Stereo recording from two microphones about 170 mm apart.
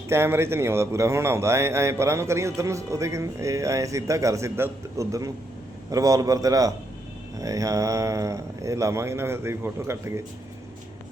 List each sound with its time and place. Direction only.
0.1 s a man's voice: 15° right (ahead or behind)